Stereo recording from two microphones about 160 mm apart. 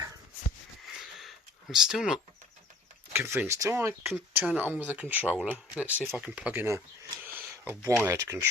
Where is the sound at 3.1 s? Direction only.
15° right (ahead or behind).